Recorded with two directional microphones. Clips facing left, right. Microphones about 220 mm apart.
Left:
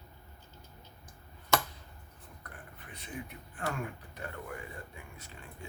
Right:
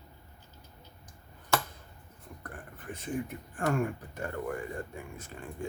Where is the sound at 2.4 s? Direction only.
45° right (ahead or behind).